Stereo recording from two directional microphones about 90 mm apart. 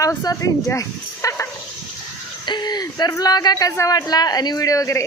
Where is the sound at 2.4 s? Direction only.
55° left (ahead or behind).